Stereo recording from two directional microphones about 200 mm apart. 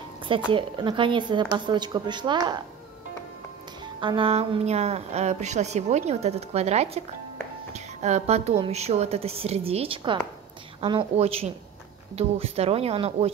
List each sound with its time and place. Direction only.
0.5 s speech: 25° right (ahead or behind)
4.0 s a woman's voice: 25° right (ahead or behind)